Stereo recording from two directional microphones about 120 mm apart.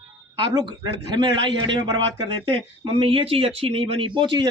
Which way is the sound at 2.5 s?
50° right (ahead or behind).